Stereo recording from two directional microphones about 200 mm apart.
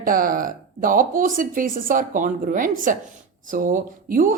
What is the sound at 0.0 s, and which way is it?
A woman's voice, 45° right (ahead or behind).